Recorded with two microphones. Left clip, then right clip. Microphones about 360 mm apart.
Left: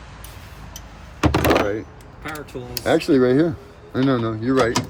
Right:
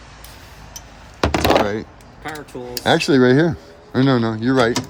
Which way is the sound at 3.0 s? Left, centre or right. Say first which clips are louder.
Right 1 dB; right.